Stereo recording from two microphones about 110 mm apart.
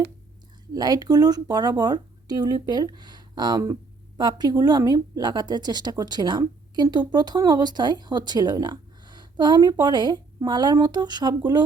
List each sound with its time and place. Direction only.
0.7 s speech: 35° right (ahead or behind)